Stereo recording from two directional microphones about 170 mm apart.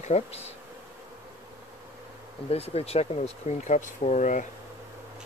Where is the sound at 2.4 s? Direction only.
35° left (ahead or behind).